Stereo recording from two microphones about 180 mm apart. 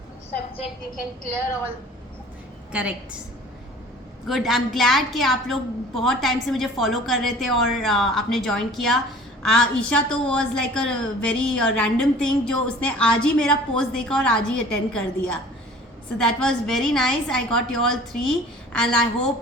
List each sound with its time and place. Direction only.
2.7 s a woman's voice: 5° right (ahead or behind)
4.3 s a woman's voice: centre (ahead or behind)